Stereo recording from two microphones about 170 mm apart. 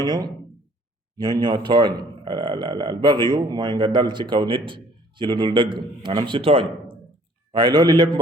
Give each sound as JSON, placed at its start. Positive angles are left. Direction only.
{"t": 0.0, "sound": "speech", "side_deg": -20}